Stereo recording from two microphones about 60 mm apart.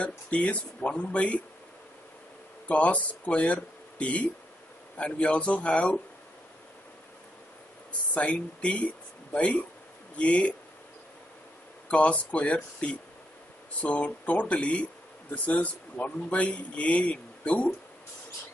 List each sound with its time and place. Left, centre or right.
0.0 s a man's voice: left
2.7 s a man's voice: left
8.1 s a man's voice: left
11.9 s a man's voice: left